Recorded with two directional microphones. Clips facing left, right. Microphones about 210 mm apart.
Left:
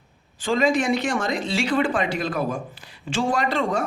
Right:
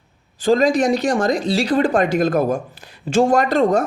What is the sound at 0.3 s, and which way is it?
Speech, 40° right (ahead or behind).